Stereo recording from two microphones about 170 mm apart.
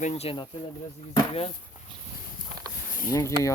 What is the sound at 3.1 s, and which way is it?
Speech, 20° left (ahead or behind).